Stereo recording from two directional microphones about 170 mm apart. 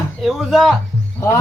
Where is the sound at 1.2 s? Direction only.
15° left (ahead or behind).